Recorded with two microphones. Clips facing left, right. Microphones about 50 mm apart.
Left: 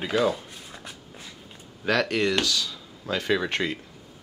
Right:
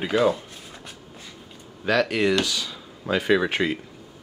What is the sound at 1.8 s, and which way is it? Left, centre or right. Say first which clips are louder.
Speech: right 2 dB; centre.